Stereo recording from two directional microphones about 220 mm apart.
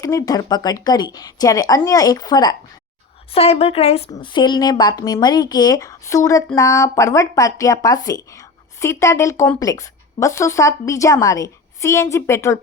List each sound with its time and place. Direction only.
0.0 s a woman's voice: 15° left (ahead or behind)